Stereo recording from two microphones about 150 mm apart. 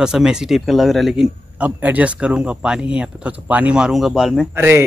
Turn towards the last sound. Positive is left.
turn(degrees=-15)  # may be behind; listen again after turning